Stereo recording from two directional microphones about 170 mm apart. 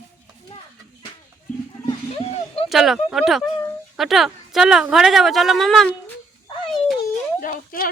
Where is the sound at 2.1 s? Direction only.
35° left (ahead or behind).